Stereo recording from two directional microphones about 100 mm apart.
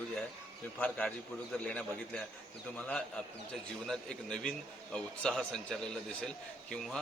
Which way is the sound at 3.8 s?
5° left (ahead or behind).